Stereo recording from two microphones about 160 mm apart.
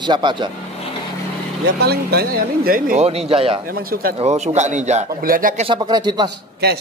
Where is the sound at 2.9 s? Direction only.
40° right (ahead or behind).